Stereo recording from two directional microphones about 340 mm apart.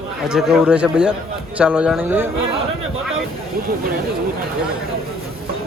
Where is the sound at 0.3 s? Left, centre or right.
Centre.